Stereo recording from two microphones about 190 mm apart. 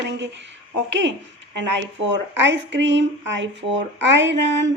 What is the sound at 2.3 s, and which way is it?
Speech, 70° right (ahead or behind).